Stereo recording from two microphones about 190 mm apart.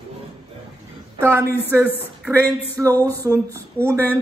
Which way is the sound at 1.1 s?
10° right (ahead or behind).